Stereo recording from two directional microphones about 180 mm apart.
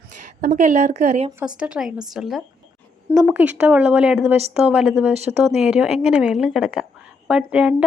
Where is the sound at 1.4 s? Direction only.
5° right (ahead or behind).